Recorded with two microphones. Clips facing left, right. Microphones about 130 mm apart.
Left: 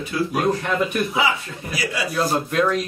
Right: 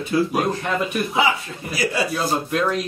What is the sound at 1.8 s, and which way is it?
Speech, 30° right (ahead or behind).